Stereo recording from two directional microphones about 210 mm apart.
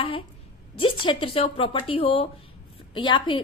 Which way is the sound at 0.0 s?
25° left (ahead or behind).